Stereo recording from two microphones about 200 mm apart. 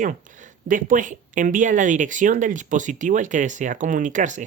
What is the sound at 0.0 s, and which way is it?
Speech, 40° right (ahead or behind).